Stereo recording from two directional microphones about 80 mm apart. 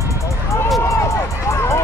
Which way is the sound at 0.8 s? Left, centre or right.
Left.